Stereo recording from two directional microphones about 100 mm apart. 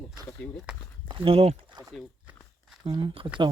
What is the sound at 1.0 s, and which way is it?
Speech, 60° right (ahead or behind).